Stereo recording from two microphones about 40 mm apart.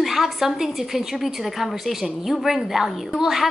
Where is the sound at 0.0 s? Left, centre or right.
Centre.